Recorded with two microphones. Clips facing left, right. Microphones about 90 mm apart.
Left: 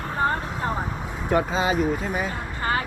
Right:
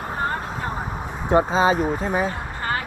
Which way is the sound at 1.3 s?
30° right (ahead or behind).